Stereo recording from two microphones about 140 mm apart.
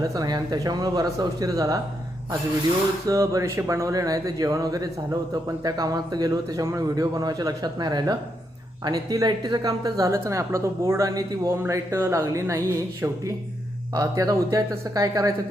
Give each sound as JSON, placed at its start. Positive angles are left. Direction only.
{"t": 0.0, "sound": "a woman's voice", "side_deg": -25}
{"t": 3.1, "sound": "a woman's voice", "side_deg": -25}